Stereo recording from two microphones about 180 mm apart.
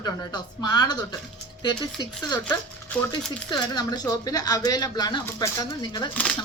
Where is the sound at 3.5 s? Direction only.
20° left (ahead or behind).